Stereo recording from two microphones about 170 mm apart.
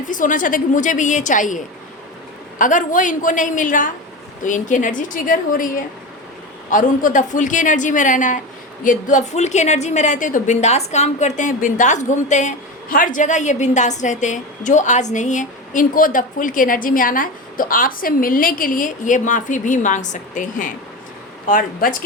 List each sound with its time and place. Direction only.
0.1 s a woman's voice: 50° left (ahead or behind)